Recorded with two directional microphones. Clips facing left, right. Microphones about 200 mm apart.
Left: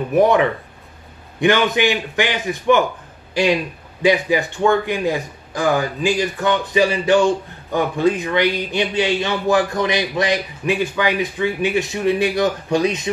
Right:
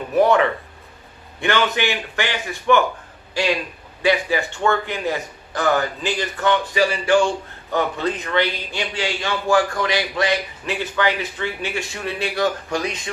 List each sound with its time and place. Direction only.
0.1 s speech: 15° left (ahead or behind)
4.0 s speech: 15° left (ahead or behind)